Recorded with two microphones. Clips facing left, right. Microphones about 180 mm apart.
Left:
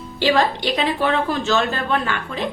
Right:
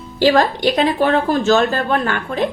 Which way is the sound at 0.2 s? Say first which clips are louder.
Right 4 dB; 40° right (ahead or behind).